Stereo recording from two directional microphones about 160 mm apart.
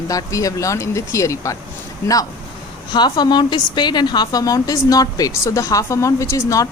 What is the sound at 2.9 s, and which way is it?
Speech, 25° left (ahead or behind).